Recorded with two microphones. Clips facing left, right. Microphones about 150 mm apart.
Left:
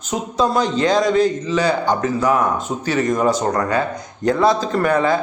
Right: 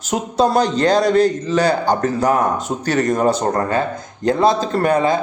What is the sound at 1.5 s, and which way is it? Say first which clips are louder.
Speech: right 2 dB; 40° right (ahead or behind).